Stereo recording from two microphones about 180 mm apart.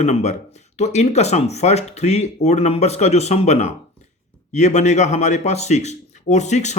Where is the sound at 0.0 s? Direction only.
40° left (ahead or behind).